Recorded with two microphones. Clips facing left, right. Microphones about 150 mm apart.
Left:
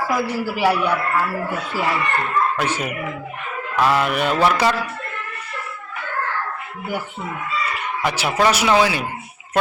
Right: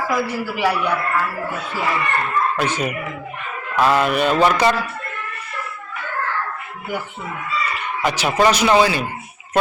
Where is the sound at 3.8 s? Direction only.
20° right (ahead or behind).